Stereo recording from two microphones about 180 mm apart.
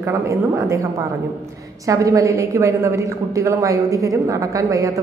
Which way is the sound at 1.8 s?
20° right (ahead or behind).